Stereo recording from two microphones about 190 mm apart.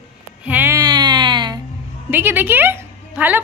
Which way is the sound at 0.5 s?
10° right (ahead or behind).